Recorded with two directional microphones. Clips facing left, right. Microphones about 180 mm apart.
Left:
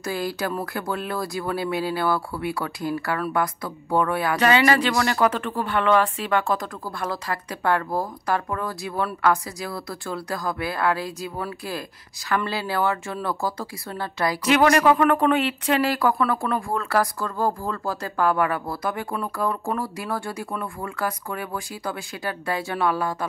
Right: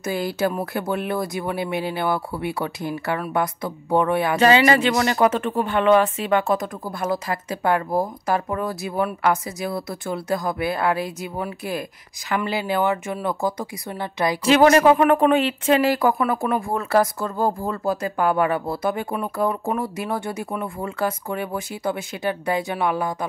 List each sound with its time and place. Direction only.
0.0 s speech: 20° right (ahead or behind)